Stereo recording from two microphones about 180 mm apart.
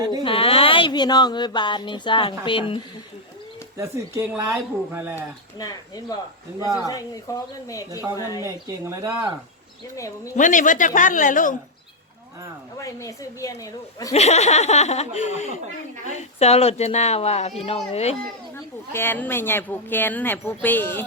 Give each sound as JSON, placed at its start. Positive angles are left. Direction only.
{"t": 0.1, "sound": "speech", "side_deg": 25}
{"t": 3.8, "sound": "speech", "side_deg": -15}
{"t": 5.5, "sound": "speech", "side_deg": 20}
{"t": 8.4, "sound": "speech", "side_deg": -15}
{"t": 10.3, "sound": "a man's voice", "side_deg": 45}
{"t": 12.8, "sound": "speech", "side_deg": 20}
{"t": 14.1, "sound": "laughter", "side_deg": 35}
{"t": 18.5, "sound": "speech", "side_deg": 15}